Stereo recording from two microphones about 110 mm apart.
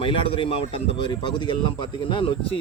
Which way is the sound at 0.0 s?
50° left (ahead or behind).